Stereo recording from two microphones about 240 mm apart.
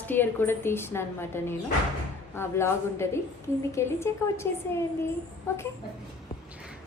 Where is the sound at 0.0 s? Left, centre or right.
Centre.